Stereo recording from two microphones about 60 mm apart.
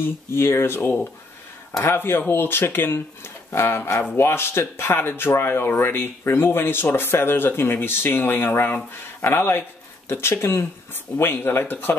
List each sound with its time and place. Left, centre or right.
0.0 s speech: left